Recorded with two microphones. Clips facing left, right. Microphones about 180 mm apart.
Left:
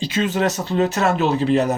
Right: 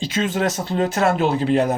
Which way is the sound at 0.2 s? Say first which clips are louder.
Left 1 dB; 50° right (ahead or behind).